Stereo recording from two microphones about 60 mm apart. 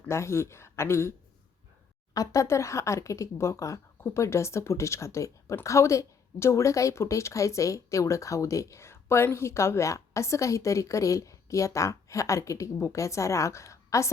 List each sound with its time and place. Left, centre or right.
0.1 s speech: left
2.1 s a woman's voice: left